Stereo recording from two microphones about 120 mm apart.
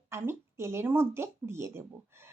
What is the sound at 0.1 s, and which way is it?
Speech, 20° right (ahead or behind).